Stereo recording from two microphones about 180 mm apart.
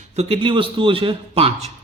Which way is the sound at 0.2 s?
30° right (ahead or behind).